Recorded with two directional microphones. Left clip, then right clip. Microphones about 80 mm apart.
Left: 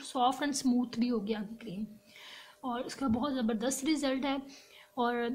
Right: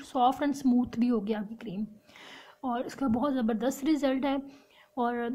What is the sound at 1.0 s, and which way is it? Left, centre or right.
A woman's voice, right.